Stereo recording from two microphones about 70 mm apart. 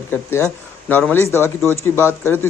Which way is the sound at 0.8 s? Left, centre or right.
Left.